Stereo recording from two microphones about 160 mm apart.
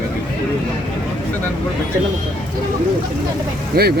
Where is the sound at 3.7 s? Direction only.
70° right (ahead or behind).